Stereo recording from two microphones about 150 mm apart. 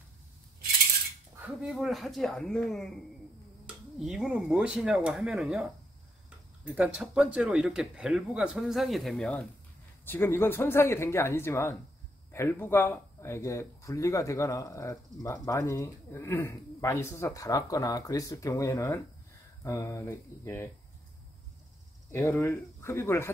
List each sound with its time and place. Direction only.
1.4 s speech: 5° right (ahead or behind); by 20.7 s 15° left (ahead or behind)
22.1 s speech: 15° left (ahead or behind)